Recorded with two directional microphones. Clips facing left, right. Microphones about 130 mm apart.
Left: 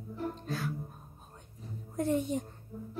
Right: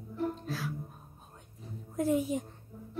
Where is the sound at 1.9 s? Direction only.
5° right (ahead or behind).